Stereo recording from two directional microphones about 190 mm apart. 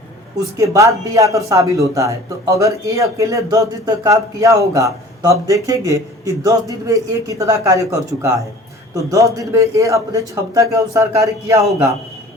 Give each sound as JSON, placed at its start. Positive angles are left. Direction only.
{"t": 0.5, "sound": "speech", "side_deg": -15}